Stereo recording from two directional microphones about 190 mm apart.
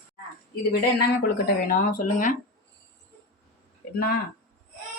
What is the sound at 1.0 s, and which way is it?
Speech, 60° left (ahead or behind).